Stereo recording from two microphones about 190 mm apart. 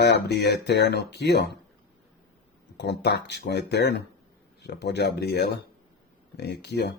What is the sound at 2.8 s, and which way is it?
Speech, 60° left (ahead or behind).